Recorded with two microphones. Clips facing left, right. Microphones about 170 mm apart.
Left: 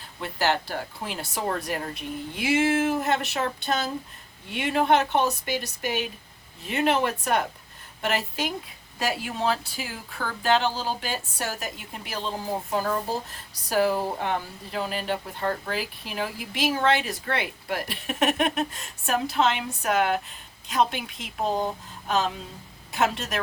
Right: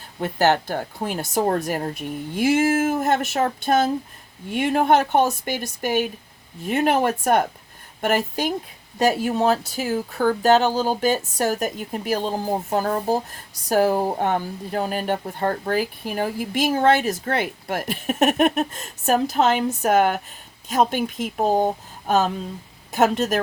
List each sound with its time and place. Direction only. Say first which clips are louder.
0.2 s speech: right 6 dB; 45° right (ahead or behind)